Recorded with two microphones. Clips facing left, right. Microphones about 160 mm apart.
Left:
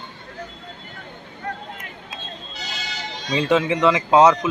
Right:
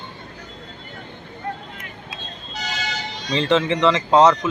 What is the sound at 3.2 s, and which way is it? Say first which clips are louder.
Speech: even; 5° left (ahead or behind).